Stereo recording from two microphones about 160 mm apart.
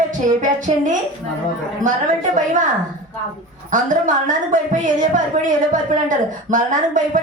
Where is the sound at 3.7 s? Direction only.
50° right (ahead or behind).